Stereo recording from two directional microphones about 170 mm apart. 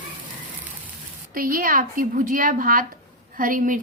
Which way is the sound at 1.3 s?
55° right (ahead or behind).